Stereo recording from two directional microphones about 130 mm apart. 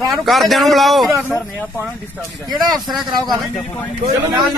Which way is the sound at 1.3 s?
20° left (ahead or behind).